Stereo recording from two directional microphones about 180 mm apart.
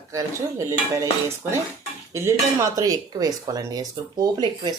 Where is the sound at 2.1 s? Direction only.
15° right (ahead or behind).